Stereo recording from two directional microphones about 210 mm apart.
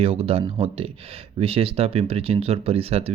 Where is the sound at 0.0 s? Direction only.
25° right (ahead or behind).